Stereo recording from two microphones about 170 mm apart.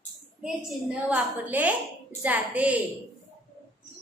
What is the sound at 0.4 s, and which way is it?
A woman's voice, 5° right (ahead or behind).